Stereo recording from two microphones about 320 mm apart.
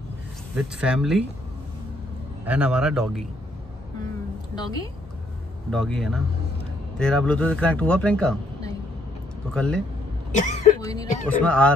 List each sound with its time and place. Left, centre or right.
0.6 s speech: centre
2.4 s speech: centre
5.7 s speech: centre
10.3 s speech: left
10.8 s speech: centre